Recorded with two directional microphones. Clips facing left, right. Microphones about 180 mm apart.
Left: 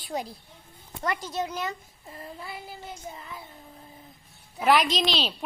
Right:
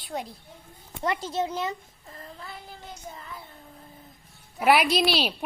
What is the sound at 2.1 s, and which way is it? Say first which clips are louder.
Child singing: left 3 dB; 10° left (ahead or behind).